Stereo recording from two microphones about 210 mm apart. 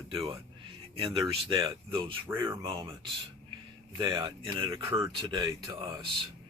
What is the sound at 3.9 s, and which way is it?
Speech, 20° right (ahead or behind).